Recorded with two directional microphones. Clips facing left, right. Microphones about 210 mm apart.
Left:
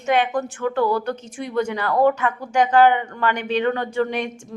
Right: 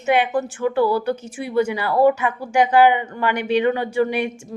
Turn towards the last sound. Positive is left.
turn(degrees=-10)  # may be behind; listen again after turning